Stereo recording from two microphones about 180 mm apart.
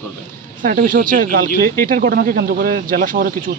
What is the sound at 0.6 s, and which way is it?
Speech, 50° right (ahead or behind).